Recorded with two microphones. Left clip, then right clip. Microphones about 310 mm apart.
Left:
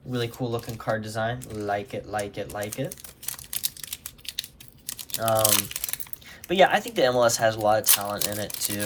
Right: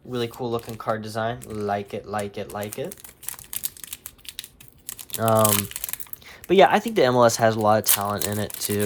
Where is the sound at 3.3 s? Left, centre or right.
Centre.